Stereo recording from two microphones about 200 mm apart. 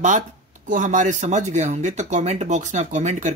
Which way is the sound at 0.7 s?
40° right (ahead or behind).